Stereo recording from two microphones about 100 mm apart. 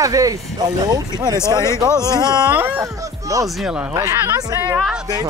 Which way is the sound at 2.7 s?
35° right (ahead or behind).